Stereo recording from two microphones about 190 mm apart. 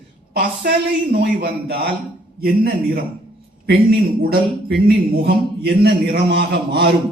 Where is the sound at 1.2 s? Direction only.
60° right (ahead or behind).